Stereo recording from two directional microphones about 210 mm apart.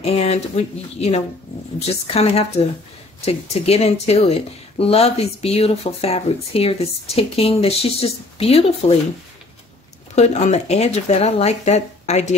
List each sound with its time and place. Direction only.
0.0 s speech: 30° left (ahead or behind)
10.1 s speech: 30° left (ahead or behind)